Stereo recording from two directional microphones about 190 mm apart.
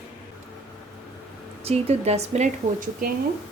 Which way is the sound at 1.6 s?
35° right (ahead or behind).